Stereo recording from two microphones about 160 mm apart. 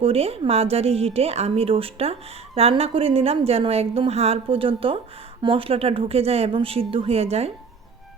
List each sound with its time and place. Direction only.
0.0 s a woman's voice: 40° right (ahead or behind)